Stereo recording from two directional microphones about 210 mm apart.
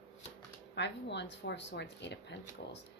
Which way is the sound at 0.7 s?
55° left (ahead or behind).